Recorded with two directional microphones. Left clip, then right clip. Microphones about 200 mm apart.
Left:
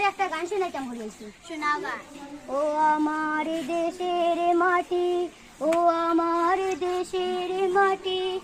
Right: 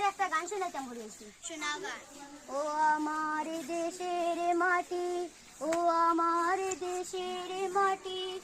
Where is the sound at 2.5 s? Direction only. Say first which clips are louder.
Left 7 dB; 15° left (ahead or behind).